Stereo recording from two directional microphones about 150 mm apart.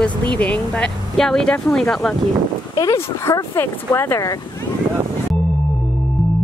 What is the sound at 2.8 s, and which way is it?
Speech, 20° left (ahead or behind).